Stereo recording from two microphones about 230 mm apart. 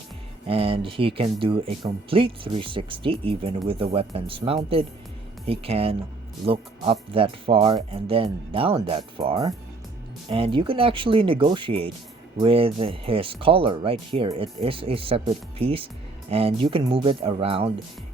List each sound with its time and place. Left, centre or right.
0.4 s speech: right